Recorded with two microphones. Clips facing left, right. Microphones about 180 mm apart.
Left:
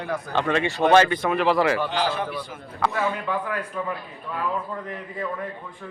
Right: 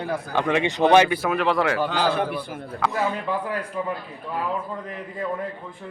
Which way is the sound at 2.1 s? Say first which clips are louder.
Right 4 dB; 55° right (ahead or behind).